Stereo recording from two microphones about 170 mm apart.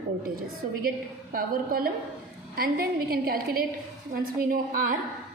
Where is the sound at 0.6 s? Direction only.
50° right (ahead or behind).